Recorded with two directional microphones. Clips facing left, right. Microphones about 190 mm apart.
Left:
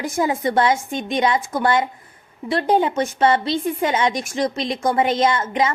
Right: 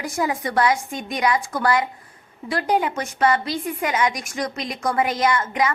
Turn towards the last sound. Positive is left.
turn(degrees=25)  # may be behind; listen again after turning